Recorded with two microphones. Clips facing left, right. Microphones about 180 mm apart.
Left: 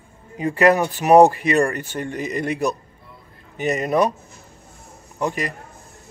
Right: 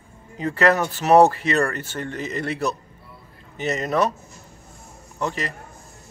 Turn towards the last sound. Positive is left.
turn(degrees=15)  # may be behind; listen again after turning